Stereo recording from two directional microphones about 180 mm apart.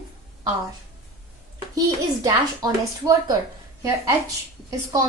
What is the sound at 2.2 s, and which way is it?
A woman's voice, 20° right (ahead or behind).